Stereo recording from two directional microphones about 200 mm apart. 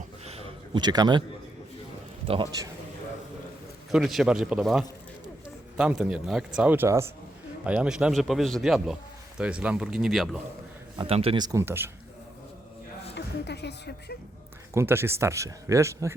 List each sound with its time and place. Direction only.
0.3 s a sound: 30° right (ahead or behind)
2.2 s speech: 25° right (ahead or behind)
3.9 s speech: centre (ahead or behind)
10.9 s speech: 30° right (ahead or behind); by 11.9 s 10° right (ahead or behind)
13.1 s speech: 55° left (ahead or behind)
14.7 s speech: 15° right (ahead or behind)